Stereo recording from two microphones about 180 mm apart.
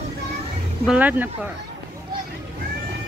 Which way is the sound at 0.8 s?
10° right (ahead or behind).